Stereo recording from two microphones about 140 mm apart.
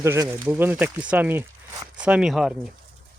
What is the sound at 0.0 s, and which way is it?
Speech, 20° right (ahead or behind).